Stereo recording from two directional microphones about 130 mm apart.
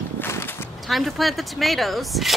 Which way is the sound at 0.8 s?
Centre (ahead or behind).